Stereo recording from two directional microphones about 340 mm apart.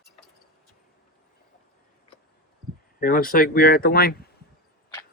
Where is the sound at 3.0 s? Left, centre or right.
Left.